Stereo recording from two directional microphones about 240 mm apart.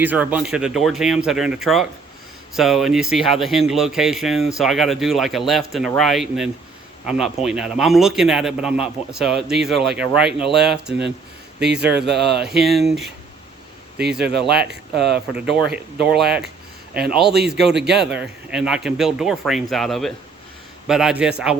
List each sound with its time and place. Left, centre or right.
0.0 s speech: centre
11.6 s speech: right
12.5 s speech: centre
14.2 s speech: right
15.6 s speech: centre
18.0 s speech: centre